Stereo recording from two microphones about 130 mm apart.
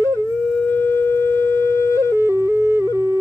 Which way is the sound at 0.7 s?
15° left (ahead or behind).